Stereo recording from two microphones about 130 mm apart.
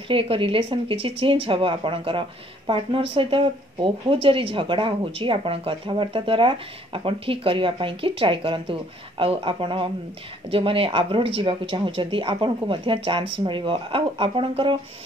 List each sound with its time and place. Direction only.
0.1 s speech: 45° right (ahead or behind)